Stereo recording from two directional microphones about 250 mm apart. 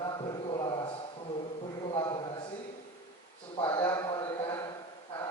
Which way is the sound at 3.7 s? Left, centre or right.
Centre.